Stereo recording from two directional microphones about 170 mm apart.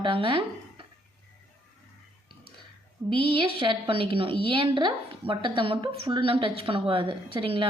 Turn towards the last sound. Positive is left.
turn(degrees=-30)  # may be behind; listen again after turning